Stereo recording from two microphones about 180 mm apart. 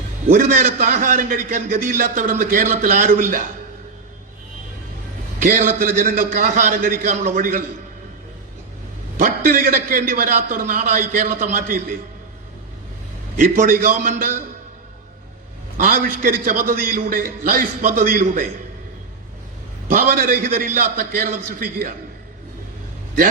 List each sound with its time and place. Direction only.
0.3 s a man's voice: 45° right (ahead or behind)
5.4 s a man's voice: 50° right (ahead or behind)
9.1 s a man's voice: 50° right (ahead or behind)
13.3 s a man's voice: 45° right (ahead or behind)
15.8 s a man's voice: 50° right (ahead or behind)
19.9 s a man's voice: 50° right (ahead or behind)